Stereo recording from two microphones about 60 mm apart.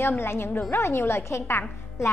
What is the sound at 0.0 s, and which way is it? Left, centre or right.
A woman's voice, left.